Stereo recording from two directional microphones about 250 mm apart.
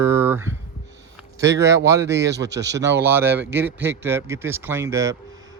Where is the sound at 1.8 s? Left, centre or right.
Centre.